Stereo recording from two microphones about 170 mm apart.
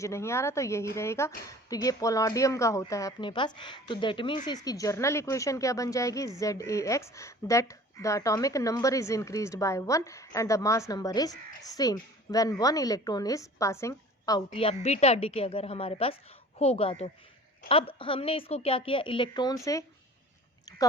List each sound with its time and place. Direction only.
0.0 s speech: 15° left (ahead or behind)
14.5 s a woman's voice: 35° left (ahead or behind)